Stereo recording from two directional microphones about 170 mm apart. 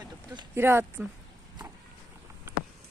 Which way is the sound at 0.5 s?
15° right (ahead or behind).